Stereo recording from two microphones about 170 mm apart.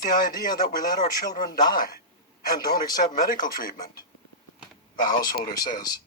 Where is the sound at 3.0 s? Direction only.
50° left (ahead or behind).